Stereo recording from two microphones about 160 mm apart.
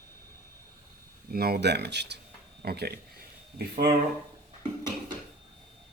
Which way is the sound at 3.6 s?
75° right (ahead or behind).